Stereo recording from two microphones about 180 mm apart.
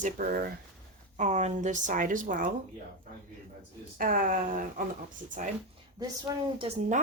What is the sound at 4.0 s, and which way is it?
Speech, 50° right (ahead or behind).